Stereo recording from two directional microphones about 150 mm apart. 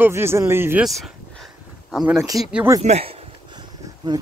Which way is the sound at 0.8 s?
Centre (ahead or behind).